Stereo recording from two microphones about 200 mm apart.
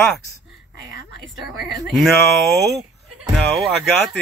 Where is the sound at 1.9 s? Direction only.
Centre (ahead or behind).